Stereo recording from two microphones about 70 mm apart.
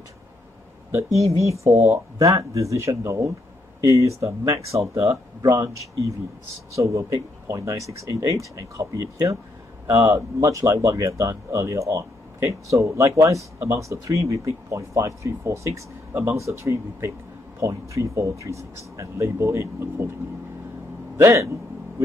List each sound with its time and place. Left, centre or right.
0.9 s speech: right
21.2 s speech: right